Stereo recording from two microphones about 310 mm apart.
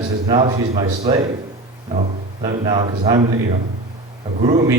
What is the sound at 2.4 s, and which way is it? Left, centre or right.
Speech, centre.